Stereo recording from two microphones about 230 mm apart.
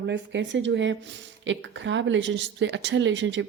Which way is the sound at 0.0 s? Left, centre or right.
Right.